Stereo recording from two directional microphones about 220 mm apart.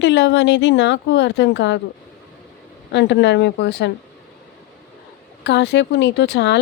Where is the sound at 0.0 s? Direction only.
55° left (ahead or behind).